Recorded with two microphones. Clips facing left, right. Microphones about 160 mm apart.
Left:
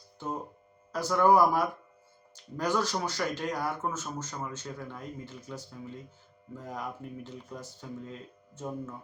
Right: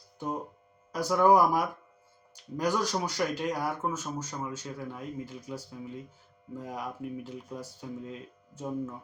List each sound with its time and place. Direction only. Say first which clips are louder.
0.9 s speech: even; 10° right (ahead or behind)